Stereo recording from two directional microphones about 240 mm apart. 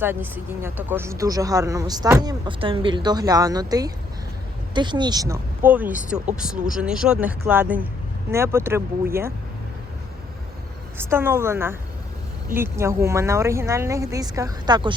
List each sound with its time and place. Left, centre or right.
0.0 s speech: centre
10.9 s speech: centre